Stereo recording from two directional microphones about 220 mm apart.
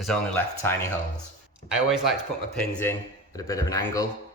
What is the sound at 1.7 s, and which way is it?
Speech, centre (ahead or behind).